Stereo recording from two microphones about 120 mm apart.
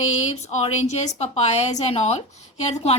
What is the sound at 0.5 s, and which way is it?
A woman's voice, 70° left (ahead or behind).